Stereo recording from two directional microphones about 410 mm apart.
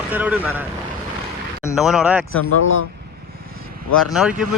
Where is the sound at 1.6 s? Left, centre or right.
Centre.